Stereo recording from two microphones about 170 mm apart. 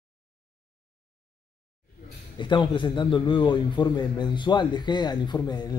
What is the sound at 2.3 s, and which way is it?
A man's voice, 25° left (ahead or behind).